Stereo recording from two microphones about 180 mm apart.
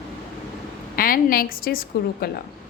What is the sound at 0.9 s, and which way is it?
A woman's voice, 55° left (ahead or behind).